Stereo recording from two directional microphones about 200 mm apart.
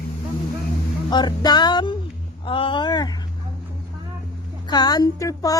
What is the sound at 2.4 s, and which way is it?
Speech, 25° left (ahead or behind).